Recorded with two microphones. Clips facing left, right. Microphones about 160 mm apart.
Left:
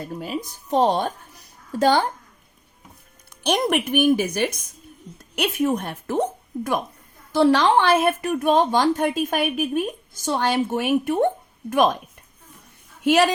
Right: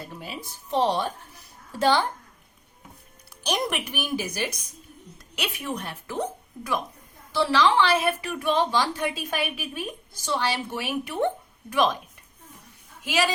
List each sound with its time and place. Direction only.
0.1 s speech: 45° left (ahead or behind)
3.4 s a woman's voice: 55° left (ahead or behind)
13.0 s speech: 55° left (ahead or behind)